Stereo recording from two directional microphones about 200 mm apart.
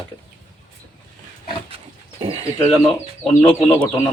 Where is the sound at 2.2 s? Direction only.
30° right (ahead or behind).